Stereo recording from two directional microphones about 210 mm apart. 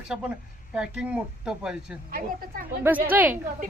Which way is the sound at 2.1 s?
45° right (ahead or behind).